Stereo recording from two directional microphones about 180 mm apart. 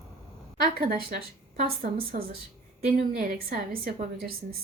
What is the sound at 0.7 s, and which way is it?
A woman's voice, 55° right (ahead or behind).